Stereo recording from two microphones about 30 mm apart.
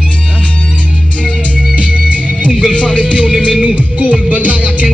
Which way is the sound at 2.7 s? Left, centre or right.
Left.